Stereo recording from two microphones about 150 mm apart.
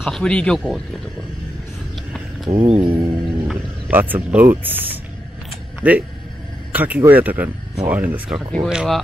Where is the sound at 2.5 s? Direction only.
45° right (ahead or behind).